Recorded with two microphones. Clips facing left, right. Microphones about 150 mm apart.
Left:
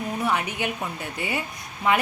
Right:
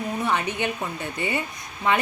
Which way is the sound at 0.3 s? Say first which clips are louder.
Right 1 dB; 10° left (ahead or behind).